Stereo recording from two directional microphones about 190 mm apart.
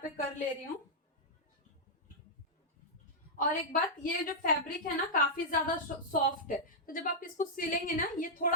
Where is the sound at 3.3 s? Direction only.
45° left (ahead or behind).